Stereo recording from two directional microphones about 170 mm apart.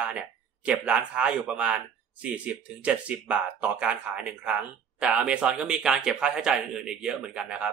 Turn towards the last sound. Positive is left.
turn(degrees=-5)  # may be behind; listen again after turning